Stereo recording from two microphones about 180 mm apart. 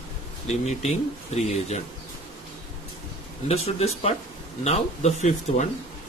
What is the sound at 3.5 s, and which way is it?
Speech, 35° left (ahead or behind).